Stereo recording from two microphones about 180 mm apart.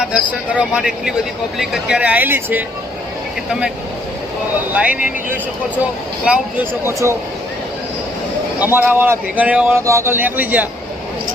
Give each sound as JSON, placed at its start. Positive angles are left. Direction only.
{"t": 0.0, "sound": "speech", "side_deg": -5}
{"t": 4.7, "sound": "speech", "side_deg": -5}
{"t": 6.2, "sound": "speech", "side_deg": -10}
{"t": 8.5, "sound": "speech", "side_deg": -10}